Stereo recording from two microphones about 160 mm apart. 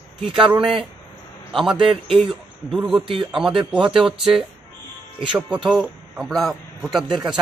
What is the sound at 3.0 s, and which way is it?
Speech, 35° right (ahead or behind).